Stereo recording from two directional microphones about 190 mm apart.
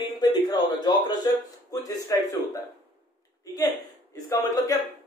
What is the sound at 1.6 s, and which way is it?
Speech, 20° left (ahead or behind).